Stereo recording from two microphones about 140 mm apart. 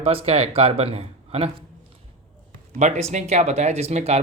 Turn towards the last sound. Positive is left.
turn(degrees=-50)  # may be behind; listen again after turning